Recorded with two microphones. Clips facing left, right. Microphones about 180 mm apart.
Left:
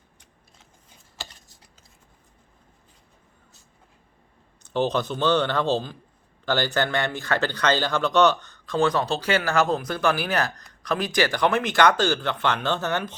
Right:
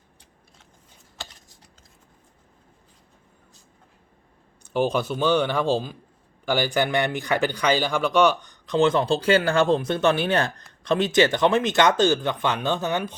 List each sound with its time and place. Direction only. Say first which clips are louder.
4.6 s speech: right 1 dB; 10° right (ahead or behind)